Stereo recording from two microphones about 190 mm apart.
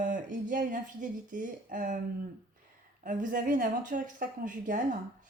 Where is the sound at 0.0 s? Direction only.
45° right (ahead or behind).